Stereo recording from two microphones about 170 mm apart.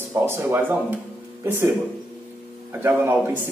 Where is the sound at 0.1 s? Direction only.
15° right (ahead or behind).